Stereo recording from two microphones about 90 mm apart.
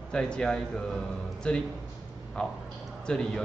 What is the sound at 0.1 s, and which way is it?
A man's voice, 10° left (ahead or behind).